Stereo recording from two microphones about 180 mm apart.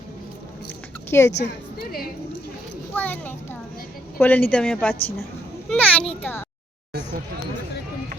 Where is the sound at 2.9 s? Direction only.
10° left (ahead or behind).